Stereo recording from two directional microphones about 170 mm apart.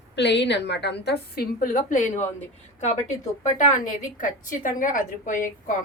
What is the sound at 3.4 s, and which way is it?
A woman's voice, 50° left (ahead or behind).